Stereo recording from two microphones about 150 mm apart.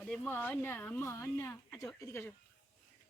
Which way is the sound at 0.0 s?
5° left (ahead or behind).